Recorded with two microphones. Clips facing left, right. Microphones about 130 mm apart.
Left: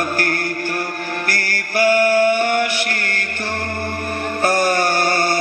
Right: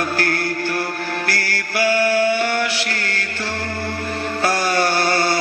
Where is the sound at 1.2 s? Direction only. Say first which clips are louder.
Even; 50° left (ahead or behind).